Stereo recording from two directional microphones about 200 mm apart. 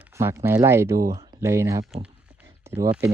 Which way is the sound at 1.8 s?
Centre (ahead or behind).